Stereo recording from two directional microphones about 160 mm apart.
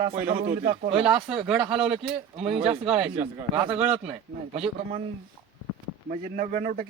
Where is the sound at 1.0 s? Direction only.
5° right (ahead or behind).